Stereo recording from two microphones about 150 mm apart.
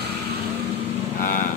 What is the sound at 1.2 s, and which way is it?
Speech, 60° left (ahead or behind).